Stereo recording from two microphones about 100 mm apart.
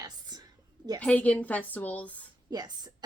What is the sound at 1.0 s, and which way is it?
A woman's voice, 15° left (ahead or behind).